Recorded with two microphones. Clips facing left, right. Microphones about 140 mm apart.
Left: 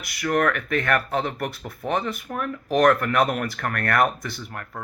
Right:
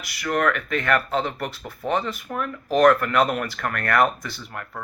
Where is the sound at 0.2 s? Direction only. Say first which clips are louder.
Left 1 dB; 50° left (ahead or behind).